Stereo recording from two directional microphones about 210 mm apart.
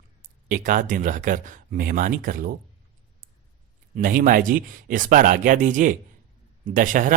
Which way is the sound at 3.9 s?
40° right (ahead or behind).